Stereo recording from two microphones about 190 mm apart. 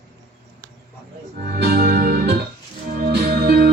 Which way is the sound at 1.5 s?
55° right (ahead or behind).